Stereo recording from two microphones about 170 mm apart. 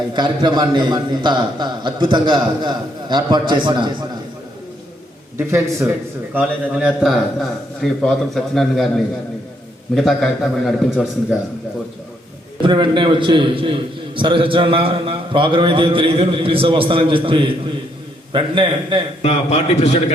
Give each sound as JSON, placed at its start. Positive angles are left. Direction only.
{"t": 0.1, "sound": "a man's voice", "side_deg": -25}
{"t": 5.4, "sound": "a man's voice", "side_deg": -15}
{"t": 6.3, "sound": "a man's voice", "side_deg": -5}
{"t": 9.9, "sound": "a man's voice", "side_deg": 0}
{"t": 12.6, "sound": "a man's voice", "side_deg": -25}
{"t": 19.2, "sound": "a man's voice", "side_deg": 35}